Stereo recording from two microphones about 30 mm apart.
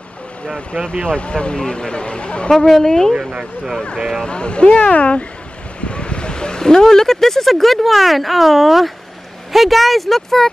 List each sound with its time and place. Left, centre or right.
1.0 s speech: left
1.5 s speech: left
2.5 s speech: centre
3.2 s speech: right
4.3 s speech: left
4.7 s speech: left; by 10.5 s centre